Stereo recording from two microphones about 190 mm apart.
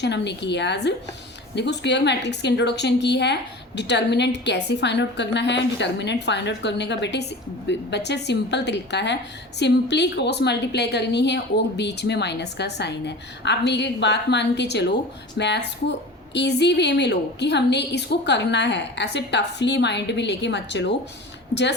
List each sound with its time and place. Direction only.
0.0 s a woman's voice: 65° left (ahead or behind)